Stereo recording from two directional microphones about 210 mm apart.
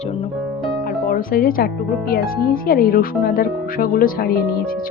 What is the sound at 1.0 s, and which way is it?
A woman's voice, 45° left (ahead or behind).